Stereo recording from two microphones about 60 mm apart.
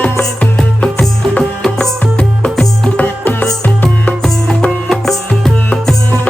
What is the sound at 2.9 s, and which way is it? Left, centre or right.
Music, left.